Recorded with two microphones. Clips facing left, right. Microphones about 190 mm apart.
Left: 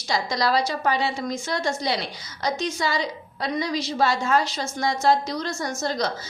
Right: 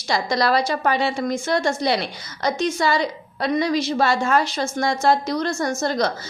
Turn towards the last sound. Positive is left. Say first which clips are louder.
# right 5 dB
turn(degrees=-60)  # may be behind; listen again after turning